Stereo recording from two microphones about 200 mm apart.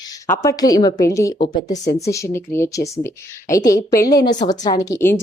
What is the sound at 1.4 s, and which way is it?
Speech, 40° left (ahead or behind).